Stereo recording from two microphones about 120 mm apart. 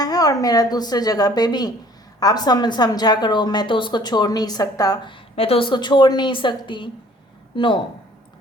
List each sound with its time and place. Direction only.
0.0 s a woman's voice: 30° left (ahead or behind)
5.4 s a woman's voice: 50° left (ahead or behind)